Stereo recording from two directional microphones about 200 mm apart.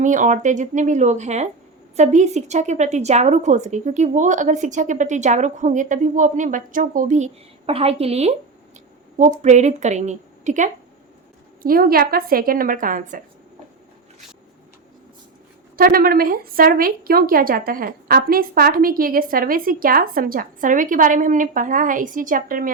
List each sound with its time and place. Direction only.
0.0 s a woman's voice: 40° right (ahead or behind)
7.7 s a woman's voice: 30° right (ahead or behind)
9.4 s a woman's voice: 35° right (ahead or behind)
15.7 s a woman's voice: 45° right (ahead or behind)